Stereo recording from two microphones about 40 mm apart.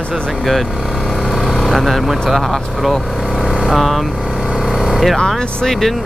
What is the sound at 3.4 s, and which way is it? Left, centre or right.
Vehicle, centre.